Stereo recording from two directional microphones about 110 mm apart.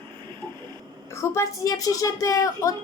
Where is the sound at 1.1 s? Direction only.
25° left (ahead or behind).